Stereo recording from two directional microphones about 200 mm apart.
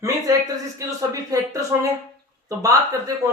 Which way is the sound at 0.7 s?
15° right (ahead or behind).